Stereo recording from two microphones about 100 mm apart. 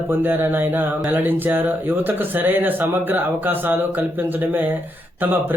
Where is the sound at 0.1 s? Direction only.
20° right (ahead or behind).